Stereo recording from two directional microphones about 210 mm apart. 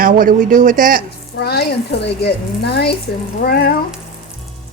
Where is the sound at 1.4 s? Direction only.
50° left (ahead or behind).